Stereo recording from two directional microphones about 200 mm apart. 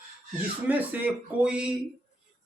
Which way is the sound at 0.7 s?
10° right (ahead or behind).